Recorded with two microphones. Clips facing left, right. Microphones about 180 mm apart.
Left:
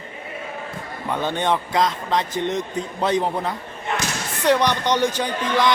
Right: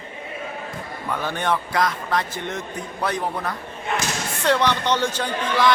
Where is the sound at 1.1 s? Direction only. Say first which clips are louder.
Left 2 dB; 20° left (ahead or behind).